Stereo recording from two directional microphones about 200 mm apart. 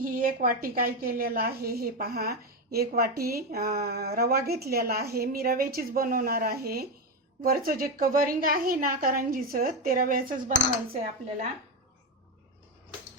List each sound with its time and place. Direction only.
0.0 s a woman's voice: 45° right (ahead or behind)